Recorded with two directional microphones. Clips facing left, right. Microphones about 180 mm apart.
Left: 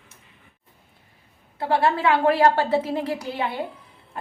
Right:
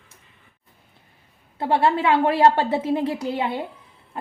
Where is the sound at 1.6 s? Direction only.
25° right (ahead or behind).